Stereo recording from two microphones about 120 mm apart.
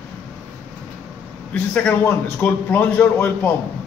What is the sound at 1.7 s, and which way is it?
A man's voice, 15° left (ahead or behind).